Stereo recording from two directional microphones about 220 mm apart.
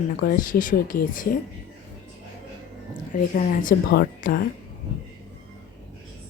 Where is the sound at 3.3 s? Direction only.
40° left (ahead or behind).